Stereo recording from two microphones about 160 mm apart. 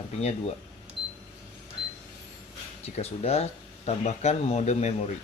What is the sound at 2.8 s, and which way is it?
Speech, 40° left (ahead or behind).